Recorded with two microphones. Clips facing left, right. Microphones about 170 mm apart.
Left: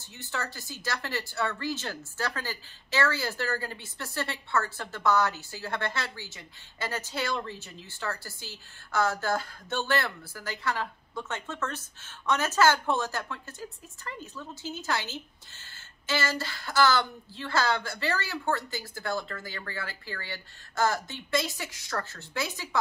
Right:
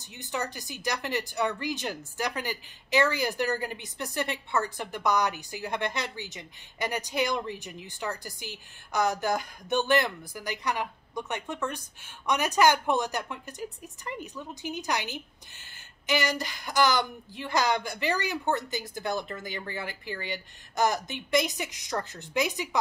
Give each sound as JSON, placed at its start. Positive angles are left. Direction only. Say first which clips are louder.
{"t": 0.0, "sound": "speech", "louder": "right 3 dB", "side_deg": -15}